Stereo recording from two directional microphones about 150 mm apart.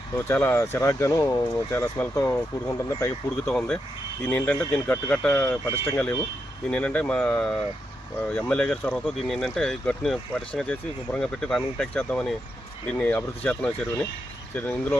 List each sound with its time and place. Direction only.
0.2 s speech: 15° left (ahead or behind)
3.5 s speech: 5° left (ahead or behind)
6.7 s speech: 5° left (ahead or behind)